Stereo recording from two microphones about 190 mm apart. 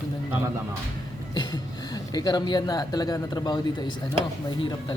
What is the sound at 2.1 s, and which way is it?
A man's voice, 20° left (ahead or behind).